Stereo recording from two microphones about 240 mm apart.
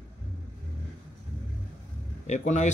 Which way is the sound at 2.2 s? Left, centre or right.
Left.